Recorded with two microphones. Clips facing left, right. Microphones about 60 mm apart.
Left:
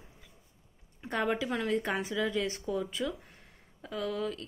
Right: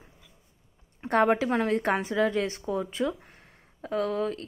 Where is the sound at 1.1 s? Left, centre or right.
Right.